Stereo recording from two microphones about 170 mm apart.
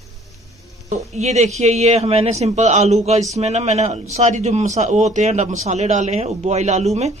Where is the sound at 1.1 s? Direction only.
40° right (ahead or behind).